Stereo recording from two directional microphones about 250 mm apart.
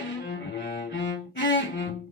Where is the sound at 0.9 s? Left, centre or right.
Left.